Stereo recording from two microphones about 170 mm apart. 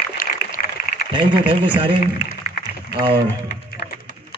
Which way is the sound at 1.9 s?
55° left (ahead or behind).